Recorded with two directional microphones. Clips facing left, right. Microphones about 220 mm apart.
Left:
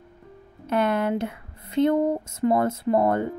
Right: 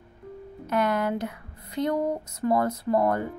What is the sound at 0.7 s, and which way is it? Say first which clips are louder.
Speech: left 2 dB; 30° left (ahead or behind).